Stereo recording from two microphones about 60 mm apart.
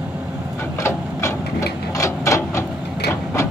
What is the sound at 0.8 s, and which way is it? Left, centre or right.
Sewing machine, left.